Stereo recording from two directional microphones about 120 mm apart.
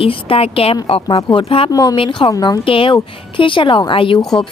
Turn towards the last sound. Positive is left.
turn(degrees=45)  # may be behind; listen again after turning